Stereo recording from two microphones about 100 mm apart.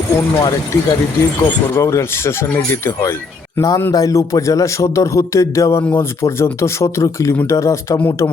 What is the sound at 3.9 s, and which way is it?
Speech, 35° left (ahead or behind).